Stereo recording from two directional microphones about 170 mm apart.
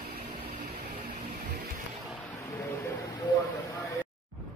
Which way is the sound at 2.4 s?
15° left (ahead or behind).